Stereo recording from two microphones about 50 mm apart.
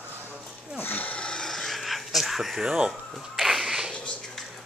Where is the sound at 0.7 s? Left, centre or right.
Left.